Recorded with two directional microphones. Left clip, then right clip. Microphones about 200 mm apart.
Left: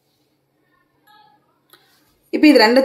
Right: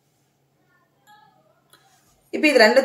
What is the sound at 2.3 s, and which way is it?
Speech, 40° left (ahead or behind).